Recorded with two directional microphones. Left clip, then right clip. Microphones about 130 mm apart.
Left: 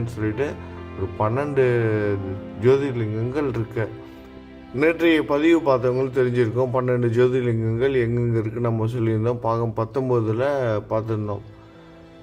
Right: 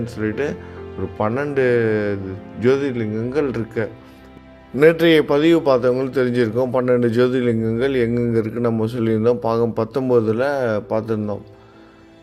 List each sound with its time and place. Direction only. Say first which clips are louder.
0.0 s a man's voice: right 3 dB; 25° right (ahead or behind)